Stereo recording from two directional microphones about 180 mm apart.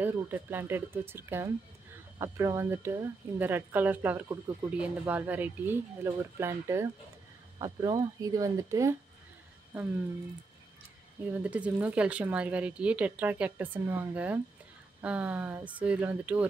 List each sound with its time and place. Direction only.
0.0 s speech: 10° right (ahead or behind)
11.2 s speech: 5° right (ahead or behind)